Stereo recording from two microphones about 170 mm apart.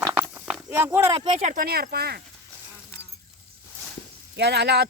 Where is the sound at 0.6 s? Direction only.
15° right (ahead or behind).